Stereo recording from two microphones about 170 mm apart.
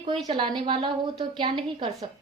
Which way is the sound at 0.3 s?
30° right (ahead or behind).